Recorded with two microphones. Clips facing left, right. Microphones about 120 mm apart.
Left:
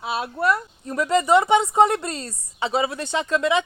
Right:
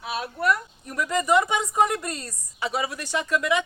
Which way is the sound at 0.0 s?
30° left (ahead or behind).